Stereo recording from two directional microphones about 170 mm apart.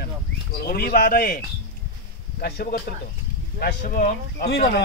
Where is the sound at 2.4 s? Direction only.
65° left (ahead or behind).